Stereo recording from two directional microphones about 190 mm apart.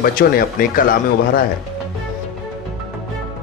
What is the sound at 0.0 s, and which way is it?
Speech, 50° left (ahead or behind).